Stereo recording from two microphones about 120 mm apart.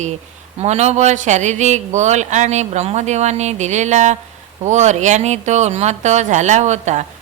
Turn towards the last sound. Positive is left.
turn(degrees=-75)  # may be behind; listen again after turning